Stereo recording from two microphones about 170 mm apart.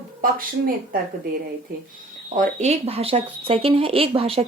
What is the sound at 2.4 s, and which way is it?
Speech, 45° right (ahead or behind).